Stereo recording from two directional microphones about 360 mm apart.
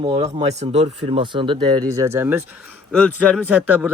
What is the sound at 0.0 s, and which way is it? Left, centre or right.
Speech, centre.